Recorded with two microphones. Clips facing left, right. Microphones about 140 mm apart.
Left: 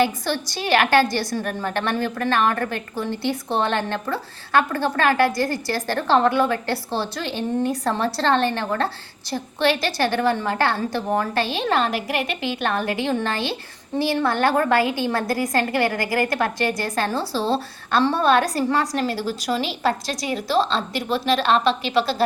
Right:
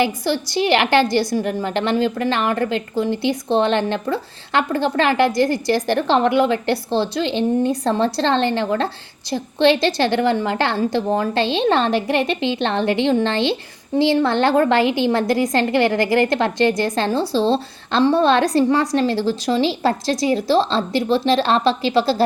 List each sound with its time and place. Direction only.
0.0 s a woman's voice: 15° right (ahead or behind); by 22.2 s 30° right (ahead or behind)